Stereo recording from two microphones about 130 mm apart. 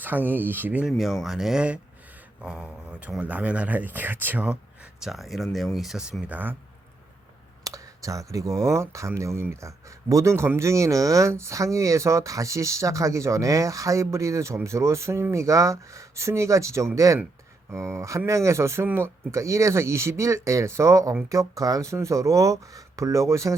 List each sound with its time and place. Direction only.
0.0 s speech: 15° right (ahead or behind)
0.9 s speech: centre (ahead or behind)
4.9 s speech: centre (ahead or behind)
7.6 s speech: 25° right (ahead or behind)